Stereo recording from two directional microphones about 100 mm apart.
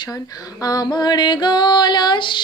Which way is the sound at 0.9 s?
45° left (ahead or behind).